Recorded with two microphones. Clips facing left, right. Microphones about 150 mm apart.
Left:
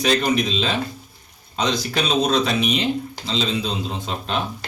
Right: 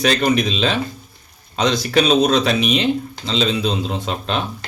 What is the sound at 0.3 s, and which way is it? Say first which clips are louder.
A man's voice: right 3 dB; 65° right (ahead or behind).